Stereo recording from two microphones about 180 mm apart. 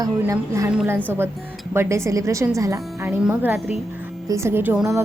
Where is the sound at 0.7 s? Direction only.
5° right (ahead or behind).